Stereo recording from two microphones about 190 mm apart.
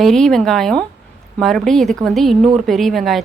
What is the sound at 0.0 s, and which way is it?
A woman's voice, centre (ahead or behind).